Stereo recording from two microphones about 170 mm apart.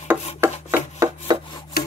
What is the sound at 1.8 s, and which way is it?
Rub, 65° left (ahead or behind).